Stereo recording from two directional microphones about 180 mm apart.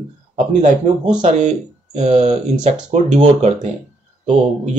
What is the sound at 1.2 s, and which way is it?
Speech, 40° right (ahead or behind).